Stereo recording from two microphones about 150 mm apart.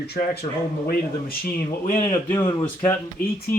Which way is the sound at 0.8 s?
85° left.